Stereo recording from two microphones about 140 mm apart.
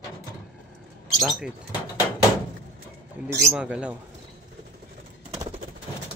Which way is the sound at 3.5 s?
5° right (ahead or behind).